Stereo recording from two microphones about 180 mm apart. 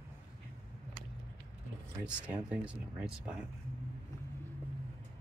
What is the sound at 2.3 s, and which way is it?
Speech, 5° right (ahead or behind).